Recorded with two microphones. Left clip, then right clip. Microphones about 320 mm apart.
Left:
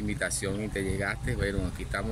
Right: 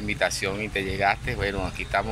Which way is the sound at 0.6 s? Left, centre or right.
Right.